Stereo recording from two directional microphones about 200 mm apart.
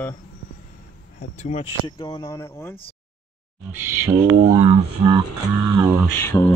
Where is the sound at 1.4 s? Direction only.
30° left (ahead or behind).